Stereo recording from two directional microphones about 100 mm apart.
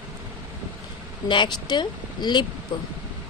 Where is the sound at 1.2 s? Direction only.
50° left (ahead or behind).